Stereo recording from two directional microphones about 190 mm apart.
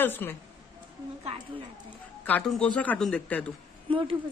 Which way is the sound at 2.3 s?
5° left (ahead or behind).